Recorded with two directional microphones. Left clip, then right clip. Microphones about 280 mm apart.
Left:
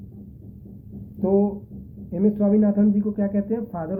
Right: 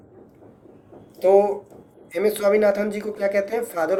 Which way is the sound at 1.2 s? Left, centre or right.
Centre.